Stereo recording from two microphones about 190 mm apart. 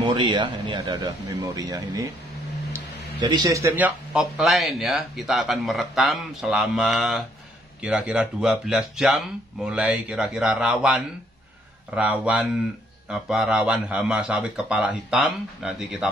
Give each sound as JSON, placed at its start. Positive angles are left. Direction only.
{"t": 0.0, "sound": "speech", "side_deg": -25}